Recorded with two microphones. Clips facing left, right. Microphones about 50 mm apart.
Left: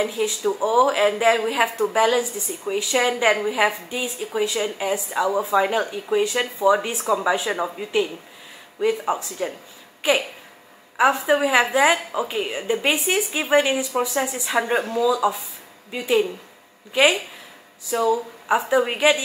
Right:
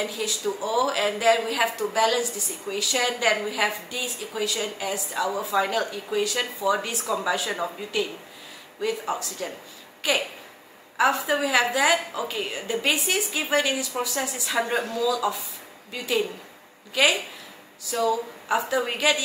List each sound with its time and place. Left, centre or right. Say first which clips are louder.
0.0 s speech: left 5 dB; left